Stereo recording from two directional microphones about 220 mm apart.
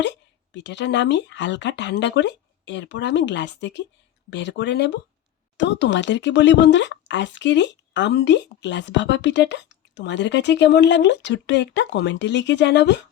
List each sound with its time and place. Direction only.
0.0 s speech: 55° left (ahead or behind)